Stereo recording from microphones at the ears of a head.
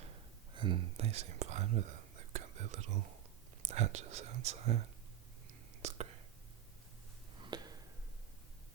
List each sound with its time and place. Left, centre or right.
0.0 s whispering: right
3.6 s speech: right
5.8 s whispering: right